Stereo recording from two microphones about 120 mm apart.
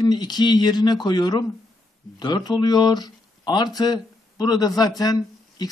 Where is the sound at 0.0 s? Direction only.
35° left (ahead or behind).